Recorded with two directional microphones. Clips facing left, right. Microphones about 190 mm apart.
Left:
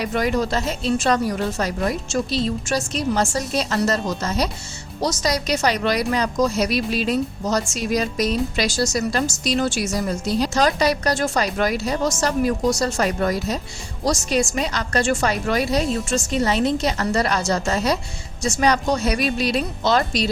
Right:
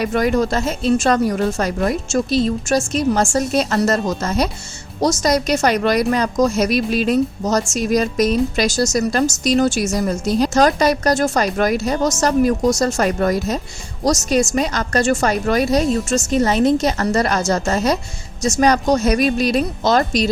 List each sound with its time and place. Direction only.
0.0 s a woman's voice: 50° right (ahead or behind)